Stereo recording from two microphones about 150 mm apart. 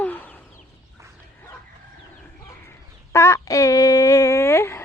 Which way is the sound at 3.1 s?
20° left (ahead or behind).